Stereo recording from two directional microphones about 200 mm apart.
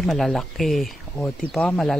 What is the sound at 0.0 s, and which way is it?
Speech, centre (ahead or behind).